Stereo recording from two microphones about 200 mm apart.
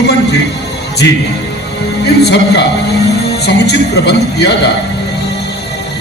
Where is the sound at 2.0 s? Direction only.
55° left (ahead or behind).